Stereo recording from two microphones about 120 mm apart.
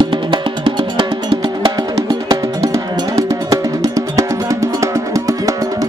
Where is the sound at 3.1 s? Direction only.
25° right (ahead or behind).